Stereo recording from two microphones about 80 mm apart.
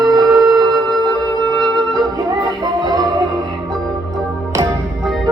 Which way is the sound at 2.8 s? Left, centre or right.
Right.